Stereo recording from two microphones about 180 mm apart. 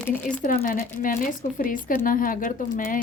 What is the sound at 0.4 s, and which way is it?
Speech, 50° left (ahead or behind).